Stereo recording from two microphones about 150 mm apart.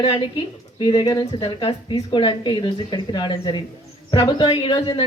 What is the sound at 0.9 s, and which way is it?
A woman's voice, 30° left (ahead or behind).